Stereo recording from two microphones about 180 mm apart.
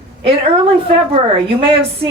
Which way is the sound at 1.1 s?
30° right (ahead or behind).